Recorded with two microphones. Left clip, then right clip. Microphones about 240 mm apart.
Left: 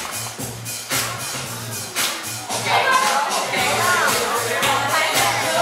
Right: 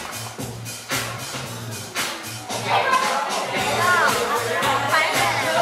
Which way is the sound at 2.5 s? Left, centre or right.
Centre.